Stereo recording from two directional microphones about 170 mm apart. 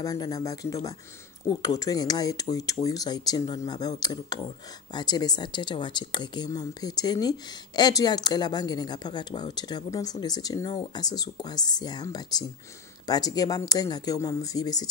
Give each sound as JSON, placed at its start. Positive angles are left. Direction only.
{"t": 0.0, "sound": "speech", "side_deg": 20}